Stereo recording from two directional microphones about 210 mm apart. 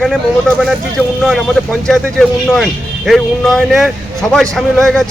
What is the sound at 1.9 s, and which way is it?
A man's voice, centre (ahead or behind).